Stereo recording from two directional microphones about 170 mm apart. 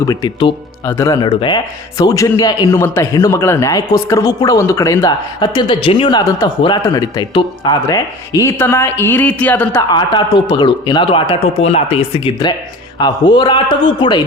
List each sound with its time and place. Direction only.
0.1 s speech: 25° left (ahead or behind); by 9.8 s 10° left (ahead or behind)
9.9 s speech: 25° left (ahead or behind)